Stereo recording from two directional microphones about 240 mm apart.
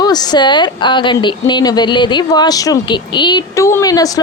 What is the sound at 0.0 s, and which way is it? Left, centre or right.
A woman's voice, centre.